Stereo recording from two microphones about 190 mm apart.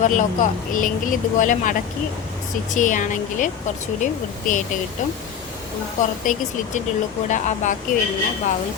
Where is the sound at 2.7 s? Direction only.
40° left (ahead or behind).